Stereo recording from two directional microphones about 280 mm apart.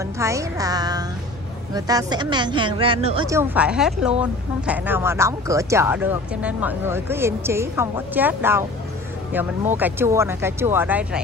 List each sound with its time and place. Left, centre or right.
0.2 s speech: centre
3.3 s speech: centre